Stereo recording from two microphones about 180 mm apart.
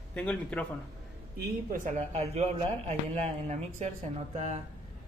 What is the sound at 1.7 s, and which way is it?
A man's voice, 45° right (ahead or behind).